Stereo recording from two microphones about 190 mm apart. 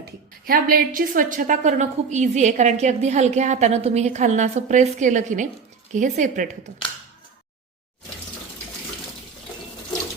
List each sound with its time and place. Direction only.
0.0 s a woman's voice: 50° right (ahead or behind)